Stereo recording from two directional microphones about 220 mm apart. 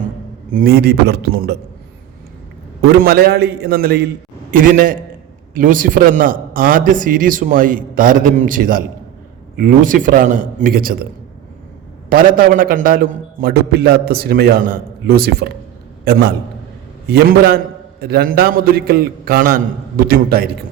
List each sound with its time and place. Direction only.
0.5 s a man's voice: 45° right (ahead or behind)
2.8 s a man's voice: 45° right (ahead or behind)
12.0 s a man's voice: 40° right (ahead or behind)
17.1 s a man's voice: 45° right (ahead or behind)